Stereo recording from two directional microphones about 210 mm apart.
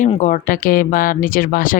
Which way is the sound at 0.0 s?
35° left (ahead or behind).